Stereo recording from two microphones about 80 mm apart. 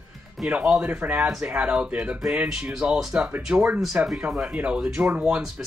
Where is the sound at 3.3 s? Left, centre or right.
Right.